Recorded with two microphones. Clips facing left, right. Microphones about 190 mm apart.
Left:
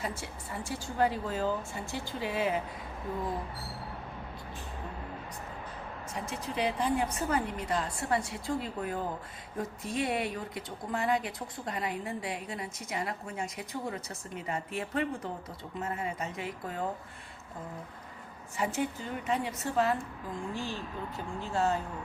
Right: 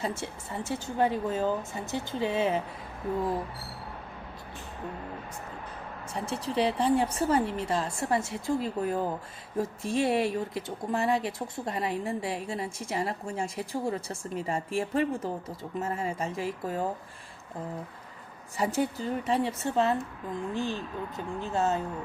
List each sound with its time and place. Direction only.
0.0 s speech: 25° right (ahead or behind)
6.1 s speech: 30° right (ahead or behind)
18.5 s a woman's voice: 35° right (ahead or behind); by 21.8 s 20° right (ahead or behind)